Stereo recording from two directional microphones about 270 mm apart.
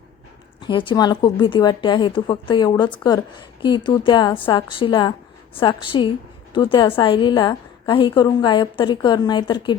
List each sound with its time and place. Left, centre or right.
0.7 s speech: centre